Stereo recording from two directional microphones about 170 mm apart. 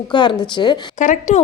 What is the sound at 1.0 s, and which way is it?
Speech, 45° left (ahead or behind).